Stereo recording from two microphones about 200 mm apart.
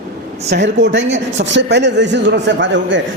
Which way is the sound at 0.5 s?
60° right (ahead or behind).